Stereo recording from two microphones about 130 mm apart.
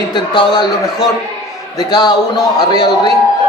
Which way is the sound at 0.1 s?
35° left (ahead or behind).